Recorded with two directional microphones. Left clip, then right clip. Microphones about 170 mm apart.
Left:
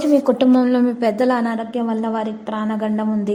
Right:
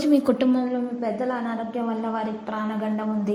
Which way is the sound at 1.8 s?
30° left (ahead or behind).